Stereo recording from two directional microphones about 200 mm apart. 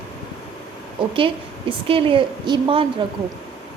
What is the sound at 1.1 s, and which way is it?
A woman's voice, 25° right (ahead or behind).